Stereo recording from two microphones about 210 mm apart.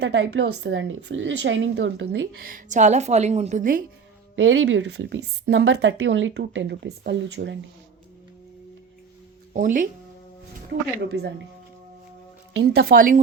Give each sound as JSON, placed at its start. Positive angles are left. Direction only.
{"t": 0.0, "sound": "speech", "side_deg": -55}
{"t": 2.5, "sound": "a woman's voice", "side_deg": -35}
{"t": 4.4, "sound": "speech", "side_deg": -65}
{"t": 9.5, "sound": "speech", "side_deg": -40}
{"t": 11.1, "sound": "speech", "side_deg": -50}
{"t": 12.5, "sound": "speech", "side_deg": -80}